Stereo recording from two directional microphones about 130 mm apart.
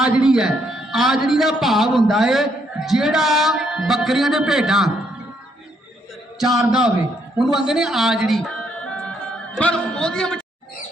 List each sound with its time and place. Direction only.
0.0 s a man's voice: 5° right (ahead or behind)
6.7 s a man's voice: 5° right (ahead or behind)